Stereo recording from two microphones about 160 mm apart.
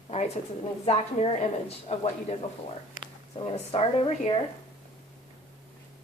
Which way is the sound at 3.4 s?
40° left (ahead or behind).